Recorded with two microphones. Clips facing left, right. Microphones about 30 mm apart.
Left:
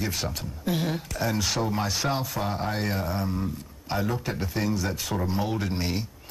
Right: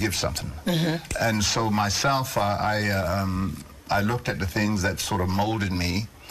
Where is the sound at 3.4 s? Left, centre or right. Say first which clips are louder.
Right 1 dB; right.